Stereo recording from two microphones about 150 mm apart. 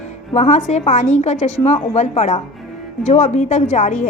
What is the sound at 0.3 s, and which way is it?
A woman's voice, 45° left (ahead or behind).